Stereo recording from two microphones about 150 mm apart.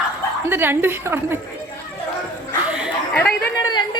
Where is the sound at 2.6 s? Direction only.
10° right (ahead or behind).